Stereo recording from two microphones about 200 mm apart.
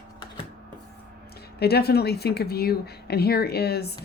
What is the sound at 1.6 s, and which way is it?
Speech, 55° left (ahead or behind).